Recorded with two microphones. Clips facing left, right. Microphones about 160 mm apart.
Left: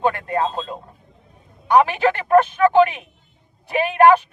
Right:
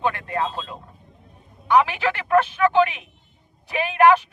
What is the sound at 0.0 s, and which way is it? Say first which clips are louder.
Speech: left 4 dB; 45° left (ahead or behind).